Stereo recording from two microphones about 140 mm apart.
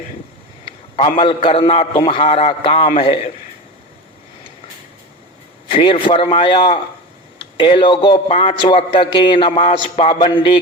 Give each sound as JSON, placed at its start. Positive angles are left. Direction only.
{"t": 1.2, "sound": "a man's voice", "side_deg": 35}
{"t": 5.7, "sound": "a man's voice", "side_deg": 40}